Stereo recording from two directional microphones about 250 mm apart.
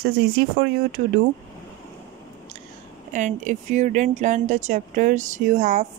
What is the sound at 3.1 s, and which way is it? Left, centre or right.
Speech, right.